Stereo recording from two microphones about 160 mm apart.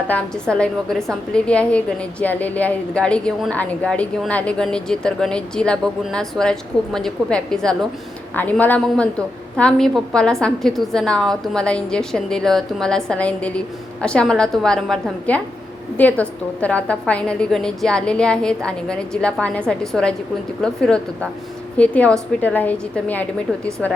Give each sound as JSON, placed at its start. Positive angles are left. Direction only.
{"t": 0.1, "sound": "a woman's voice", "side_deg": 5}